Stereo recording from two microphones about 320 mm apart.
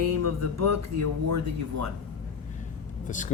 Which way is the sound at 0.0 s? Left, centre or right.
Right.